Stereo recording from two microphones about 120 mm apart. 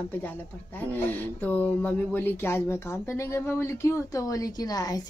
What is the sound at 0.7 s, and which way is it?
Speech, 15° left (ahead or behind).